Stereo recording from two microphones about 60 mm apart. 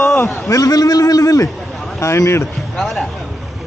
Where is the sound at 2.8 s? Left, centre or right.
Centre.